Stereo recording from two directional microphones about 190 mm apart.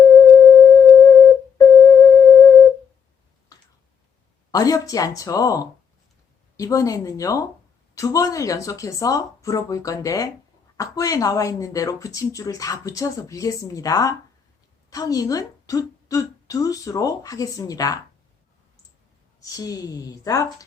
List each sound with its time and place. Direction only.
0.0 s a sound: 20° left (ahead or behind)
4.5 s a woman's voice: 20° left (ahead or behind)
19.4 s a woman's voice: 20° left (ahead or behind)